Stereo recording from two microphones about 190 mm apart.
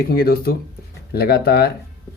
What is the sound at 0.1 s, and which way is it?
Speech, 55° left (ahead or behind).